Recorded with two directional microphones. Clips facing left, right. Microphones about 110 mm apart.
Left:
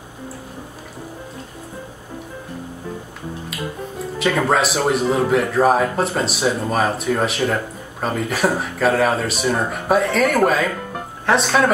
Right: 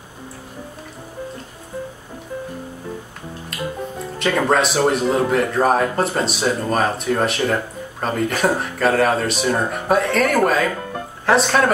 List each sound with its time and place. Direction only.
4.2 s speech: centre (ahead or behind)